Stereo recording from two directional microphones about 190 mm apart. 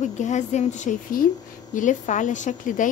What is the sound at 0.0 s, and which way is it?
A woman's voice, 40° left (ahead or behind).